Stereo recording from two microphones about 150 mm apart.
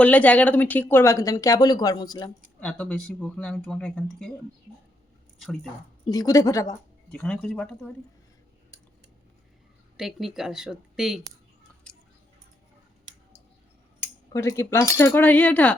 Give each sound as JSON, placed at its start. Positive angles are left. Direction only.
{"t": 0.0, "sound": "speech", "side_deg": 10}
{"t": 2.6, "sound": "speech", "side_deg": 10}
{"t": 6.1, "sound": "speech", "side_deg": 25}
{"t": 7.1, "sound": "speech", "side_deg": 5}
{"t": 10.0, "sound": "speech", "side_deg": 0}
{"t": 14.0, "sound": "speech", "side_deg": 20}